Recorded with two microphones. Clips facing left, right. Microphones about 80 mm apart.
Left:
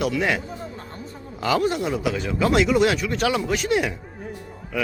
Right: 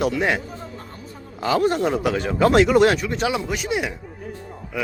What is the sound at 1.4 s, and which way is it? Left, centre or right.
Speech, right.